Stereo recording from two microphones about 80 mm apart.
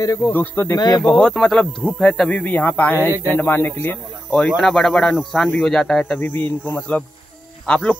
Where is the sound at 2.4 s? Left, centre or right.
Left.